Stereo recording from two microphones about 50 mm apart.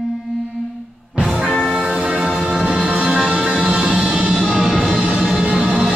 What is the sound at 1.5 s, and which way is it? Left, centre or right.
Music, centre.